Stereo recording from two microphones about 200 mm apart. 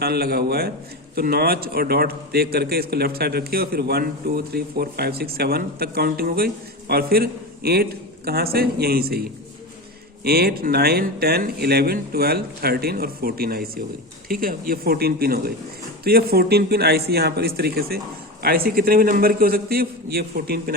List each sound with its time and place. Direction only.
0.0 s a man's voice: 50° right (ahead or behind)
10.2 s a man's voice: 50° right (ahead or behind)